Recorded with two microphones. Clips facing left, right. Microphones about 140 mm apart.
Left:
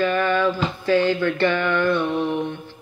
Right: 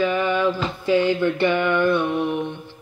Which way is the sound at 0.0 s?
15° right (ahead or behind).